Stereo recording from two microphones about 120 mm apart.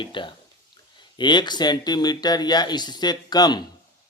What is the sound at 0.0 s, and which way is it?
Speech, 45° left (ahead or behind).